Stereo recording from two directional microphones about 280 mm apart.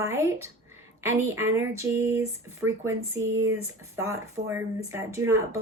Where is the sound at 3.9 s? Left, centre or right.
Centre.